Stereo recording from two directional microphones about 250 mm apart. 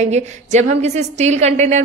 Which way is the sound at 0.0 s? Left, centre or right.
Right.